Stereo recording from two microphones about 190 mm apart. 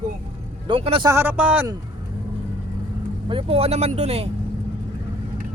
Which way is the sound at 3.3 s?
30° right (ahead or behind).